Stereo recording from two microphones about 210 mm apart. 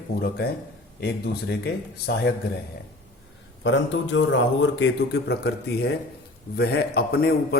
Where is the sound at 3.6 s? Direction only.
60° left (ahead or behind).